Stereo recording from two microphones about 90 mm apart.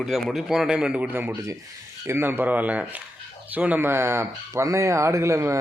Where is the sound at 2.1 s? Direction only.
25° right (ahead or behind).